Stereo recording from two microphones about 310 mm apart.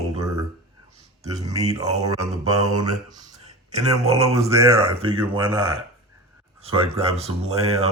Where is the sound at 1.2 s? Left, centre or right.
Centre.